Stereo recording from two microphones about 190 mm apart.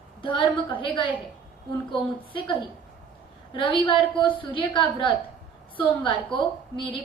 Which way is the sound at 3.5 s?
25° left (ahead or behind).